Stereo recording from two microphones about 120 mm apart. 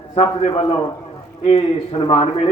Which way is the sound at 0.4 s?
60° left (ahead or behind).